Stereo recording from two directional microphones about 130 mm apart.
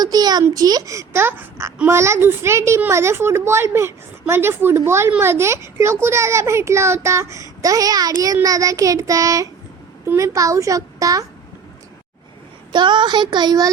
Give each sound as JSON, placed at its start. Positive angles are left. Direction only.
{"t": 0.0, "sound": "a woman's voice", "side_deg": -30}
{"t": 12.7, "sound": "speech", "side_deg": -35}